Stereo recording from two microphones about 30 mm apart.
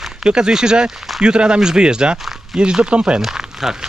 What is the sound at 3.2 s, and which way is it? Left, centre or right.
Speech, centre.